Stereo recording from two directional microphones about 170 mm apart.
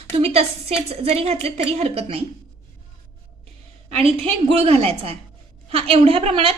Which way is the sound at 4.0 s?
35° right (ahead or behind).